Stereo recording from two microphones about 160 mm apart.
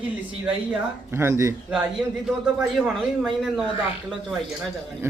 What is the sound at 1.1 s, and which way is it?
Speech, 15° right (ahead or behind).